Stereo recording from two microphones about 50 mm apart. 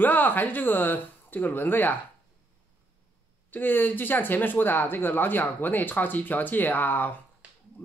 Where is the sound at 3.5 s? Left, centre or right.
Left.